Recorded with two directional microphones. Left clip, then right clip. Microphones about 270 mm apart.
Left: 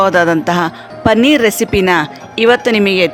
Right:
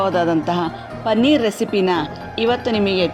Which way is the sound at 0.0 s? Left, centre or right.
Left.